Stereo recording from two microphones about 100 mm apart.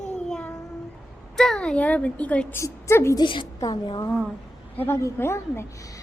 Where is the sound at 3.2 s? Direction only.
55° left (ahead or behind).